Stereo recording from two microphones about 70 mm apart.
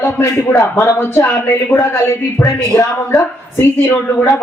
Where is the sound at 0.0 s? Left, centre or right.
Left.